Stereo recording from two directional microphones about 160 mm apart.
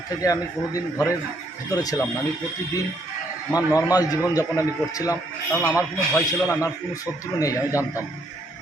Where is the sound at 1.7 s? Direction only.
25° left (ahead or behind).